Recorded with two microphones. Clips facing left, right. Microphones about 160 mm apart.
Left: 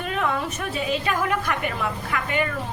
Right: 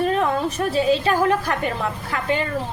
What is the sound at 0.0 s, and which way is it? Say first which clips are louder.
A woman's voice: right 5 dB; 35° right (ahead or behind).